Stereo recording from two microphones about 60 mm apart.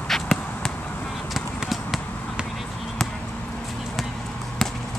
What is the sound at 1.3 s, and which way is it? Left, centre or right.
Basketball bounce, centre.